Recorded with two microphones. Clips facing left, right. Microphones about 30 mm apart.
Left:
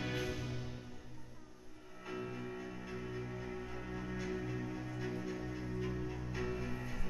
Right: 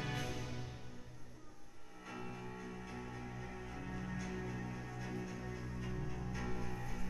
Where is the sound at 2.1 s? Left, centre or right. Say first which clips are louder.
Left 5 dB; centre.